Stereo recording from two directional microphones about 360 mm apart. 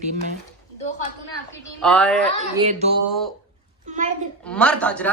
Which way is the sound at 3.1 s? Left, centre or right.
Centre.